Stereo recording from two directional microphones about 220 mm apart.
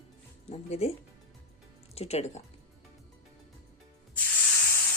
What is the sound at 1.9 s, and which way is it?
Speech, 30° left (ahead or behind).